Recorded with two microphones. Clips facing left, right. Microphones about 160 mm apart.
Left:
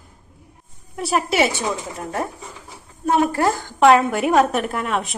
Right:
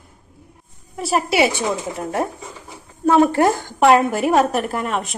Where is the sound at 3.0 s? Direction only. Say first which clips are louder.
Right 4 dB; 35° right (ahead or behind).